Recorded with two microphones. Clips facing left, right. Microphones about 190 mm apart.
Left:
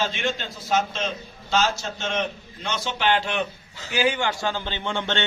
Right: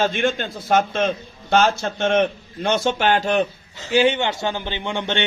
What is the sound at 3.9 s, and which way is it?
A man's voice, 25° right (ahead or behind).